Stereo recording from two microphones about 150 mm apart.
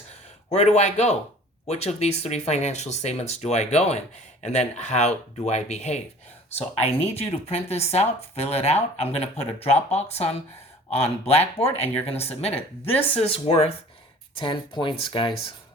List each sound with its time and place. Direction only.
0.5 s speech: 45° left (ahead or behind)